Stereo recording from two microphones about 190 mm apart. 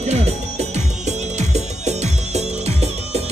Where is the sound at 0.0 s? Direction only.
35° right (ahead or behind).